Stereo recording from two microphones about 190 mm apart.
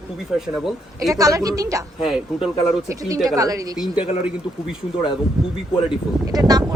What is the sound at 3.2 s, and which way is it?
Speech, 20° right (ahead or behind).